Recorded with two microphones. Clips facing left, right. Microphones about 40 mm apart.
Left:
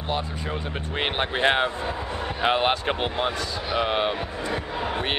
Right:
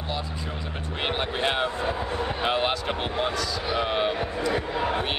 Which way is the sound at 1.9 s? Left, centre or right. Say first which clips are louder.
Right 2 dB; centre.